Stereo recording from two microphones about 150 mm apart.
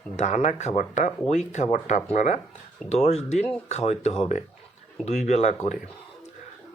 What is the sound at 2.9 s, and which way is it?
Speech, 45° left (ahead or behind).